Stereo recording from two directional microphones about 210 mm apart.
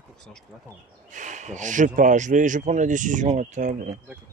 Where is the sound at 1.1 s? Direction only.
35° right (ahead or behind).